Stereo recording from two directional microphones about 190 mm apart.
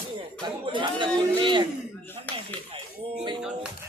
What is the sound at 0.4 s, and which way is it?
Speech, 25° right (ahead or behind).